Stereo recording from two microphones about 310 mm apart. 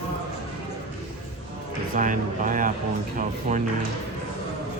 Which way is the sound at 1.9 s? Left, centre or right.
Right.